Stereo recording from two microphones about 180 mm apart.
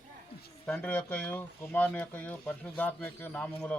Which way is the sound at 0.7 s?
10° left (ahead or behind).